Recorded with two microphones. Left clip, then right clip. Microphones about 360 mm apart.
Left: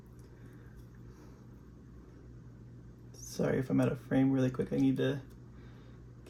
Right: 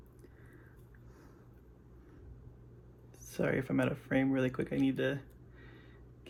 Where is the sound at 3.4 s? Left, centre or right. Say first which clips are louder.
Left 1 dB; right.